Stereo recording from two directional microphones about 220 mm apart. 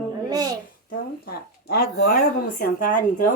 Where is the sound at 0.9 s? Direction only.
45° left (ahead or behind).